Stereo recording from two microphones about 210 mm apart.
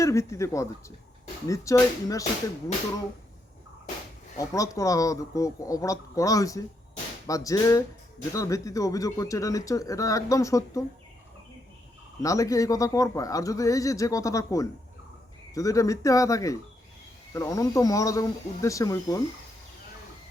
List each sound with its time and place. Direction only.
0.0 s speech: 15° left (ahead or behind)
4.4 s speech: 15° left (ahead or behind)
12.2 s speech: 15° left (ahead or behind)